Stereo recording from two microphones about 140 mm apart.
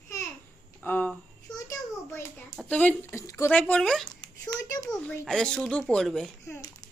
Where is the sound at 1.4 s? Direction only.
25° left (ahead or behind).